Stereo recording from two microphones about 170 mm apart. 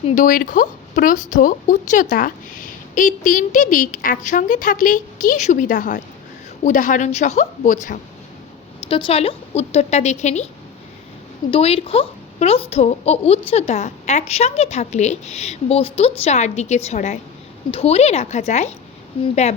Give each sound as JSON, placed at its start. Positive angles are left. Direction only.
{"t": 0.1, "sound": "speech", "side_deg": 50}
{"t": 8.9, "sound": "speech", "side_deg": 30}
{"t": 11.5, "sound": "speech", "side_deg": 35}